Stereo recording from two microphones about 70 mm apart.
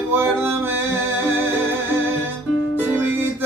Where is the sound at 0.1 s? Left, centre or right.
Right.